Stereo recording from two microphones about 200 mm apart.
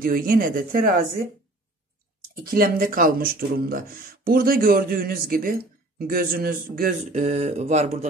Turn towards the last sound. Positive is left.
turn(degrees=-35)  # may be behind; listen again after turning